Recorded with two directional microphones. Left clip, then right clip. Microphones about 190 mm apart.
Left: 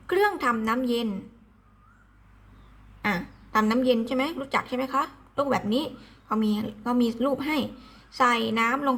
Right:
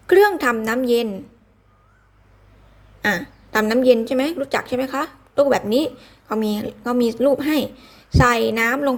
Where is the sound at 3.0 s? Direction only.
20° right (ahead or behind).